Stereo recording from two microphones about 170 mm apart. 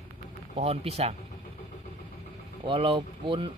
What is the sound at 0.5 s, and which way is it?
Speech, 40° right (ahead or behind).